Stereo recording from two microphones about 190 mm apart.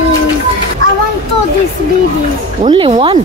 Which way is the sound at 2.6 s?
30° right (ahead or behind).